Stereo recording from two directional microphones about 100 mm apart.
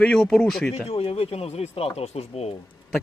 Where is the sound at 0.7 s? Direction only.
75° left (ahead or behind).